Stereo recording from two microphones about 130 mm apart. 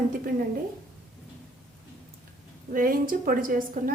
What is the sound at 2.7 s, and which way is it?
A woman's voice, 90° right.